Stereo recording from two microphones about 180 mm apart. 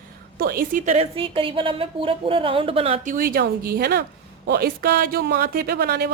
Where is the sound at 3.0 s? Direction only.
50° right (ahead or behind).